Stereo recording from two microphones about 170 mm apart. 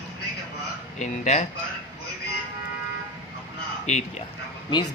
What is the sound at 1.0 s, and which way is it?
Speech, 45° left (ahead or behind).